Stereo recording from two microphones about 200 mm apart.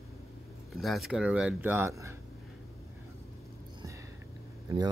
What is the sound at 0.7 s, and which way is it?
Speech, centre (ahead or behind).